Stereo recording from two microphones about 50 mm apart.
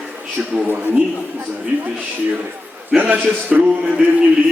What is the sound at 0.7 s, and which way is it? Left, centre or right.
A man's voice, right.